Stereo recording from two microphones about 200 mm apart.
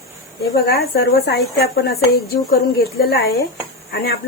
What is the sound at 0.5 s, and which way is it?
A woman's voice, 50° left (ahead or behind).